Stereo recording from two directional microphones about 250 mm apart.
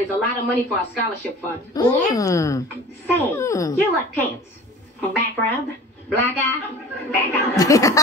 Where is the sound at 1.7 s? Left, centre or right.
Centre.